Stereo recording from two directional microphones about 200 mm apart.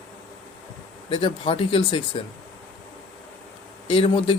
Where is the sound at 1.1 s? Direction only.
25° left (ahead or behind).